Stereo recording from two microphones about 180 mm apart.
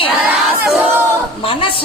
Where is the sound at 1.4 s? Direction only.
30° left (ahead or behind).